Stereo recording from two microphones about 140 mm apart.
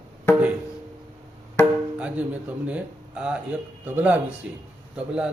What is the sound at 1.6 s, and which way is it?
Music, 20° left (ahead or behind).